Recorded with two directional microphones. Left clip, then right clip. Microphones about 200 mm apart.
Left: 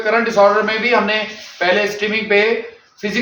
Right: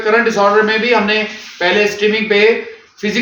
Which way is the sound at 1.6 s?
15° left (ahead or behind).